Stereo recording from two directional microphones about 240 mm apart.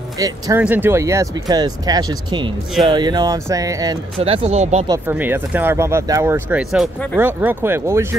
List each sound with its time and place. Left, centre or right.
0.2 s speech: centre; by 4.8 s right
4.8 s speech: centre